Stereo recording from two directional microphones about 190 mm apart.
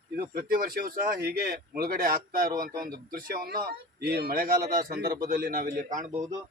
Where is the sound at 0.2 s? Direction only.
45° right (ahead or behind).